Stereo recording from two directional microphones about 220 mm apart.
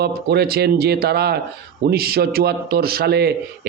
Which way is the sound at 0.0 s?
45° right (ahead or behind).